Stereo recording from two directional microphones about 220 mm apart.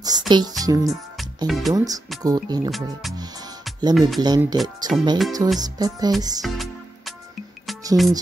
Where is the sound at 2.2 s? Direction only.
15° right (ahead or behind).